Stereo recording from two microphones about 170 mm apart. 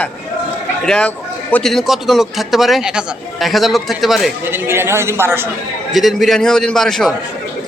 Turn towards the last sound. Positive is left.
turn(degrees=0)  # may be behind; listen again after turning